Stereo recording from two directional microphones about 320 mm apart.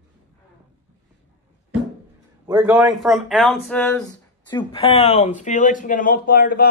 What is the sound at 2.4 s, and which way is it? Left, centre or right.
Speech, centre.